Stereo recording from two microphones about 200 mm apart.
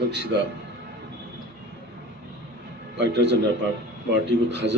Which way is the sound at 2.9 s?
60° right (ahead or behind).